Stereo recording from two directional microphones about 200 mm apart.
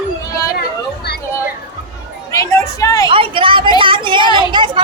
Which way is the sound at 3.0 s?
25° right (ahead or behind).